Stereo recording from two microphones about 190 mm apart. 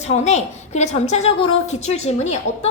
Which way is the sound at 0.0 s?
35° left (ahead or behind).